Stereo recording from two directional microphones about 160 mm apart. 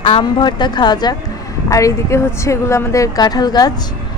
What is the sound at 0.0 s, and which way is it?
Speech, 30° left (ahead or behind).